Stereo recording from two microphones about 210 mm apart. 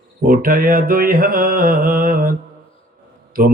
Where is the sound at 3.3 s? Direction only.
40° right (ahead or behind).